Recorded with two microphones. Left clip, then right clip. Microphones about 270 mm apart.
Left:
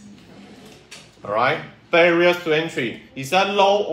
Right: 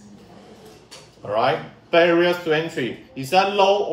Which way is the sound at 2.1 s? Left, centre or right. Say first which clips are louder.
Left 1 dB; left.